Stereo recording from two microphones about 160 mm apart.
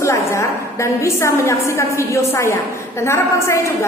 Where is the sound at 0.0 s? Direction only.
20° left (ahead or behind).